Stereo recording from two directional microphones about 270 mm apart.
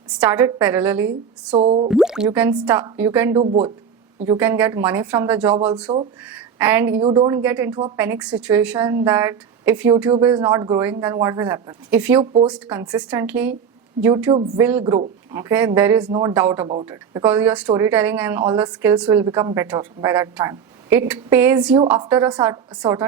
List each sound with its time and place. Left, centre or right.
0.2 s speech: centre
1.5 s speech: right
1.9 s speech: centre
3.4 s speech: right
4.3 s a woman's voice: centre